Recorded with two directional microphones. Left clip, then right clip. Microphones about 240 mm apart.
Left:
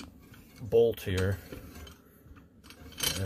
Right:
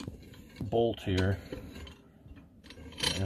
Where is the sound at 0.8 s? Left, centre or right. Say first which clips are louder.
Left 2 dB; left.